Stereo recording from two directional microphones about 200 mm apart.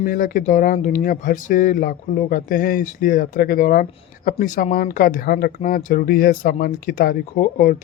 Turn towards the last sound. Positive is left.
turn(degrees=45)  # may be behind; listen again after turning